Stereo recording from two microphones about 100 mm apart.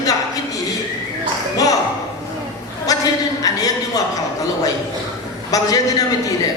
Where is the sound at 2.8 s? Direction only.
35° left (ahead or behind).